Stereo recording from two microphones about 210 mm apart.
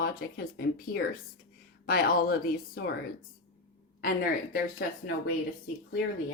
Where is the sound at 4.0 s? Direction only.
45° left (ahead or behind).